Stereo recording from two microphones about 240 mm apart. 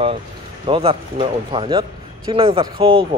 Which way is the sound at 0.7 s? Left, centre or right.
Right.